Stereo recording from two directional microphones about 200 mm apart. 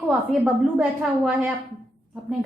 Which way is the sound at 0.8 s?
5° right (ahead or behind).